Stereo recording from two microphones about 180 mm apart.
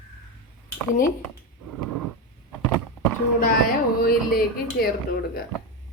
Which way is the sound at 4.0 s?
55° left (ahead or behind).